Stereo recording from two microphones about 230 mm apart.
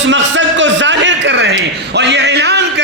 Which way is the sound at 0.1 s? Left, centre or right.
Right.